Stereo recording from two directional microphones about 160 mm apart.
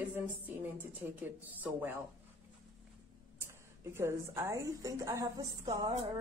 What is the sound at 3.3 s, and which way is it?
A woman's voice, 15° right (ahead or behind).